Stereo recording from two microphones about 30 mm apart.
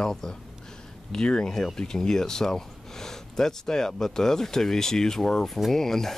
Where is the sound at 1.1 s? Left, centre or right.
Left.